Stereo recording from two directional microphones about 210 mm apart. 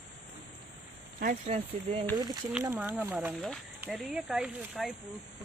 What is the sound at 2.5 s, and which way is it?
Speech, 5° right (ahead or behind).